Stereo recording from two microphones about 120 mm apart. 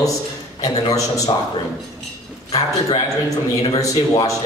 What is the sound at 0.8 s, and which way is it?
Speech, 30° left (ahead or behind).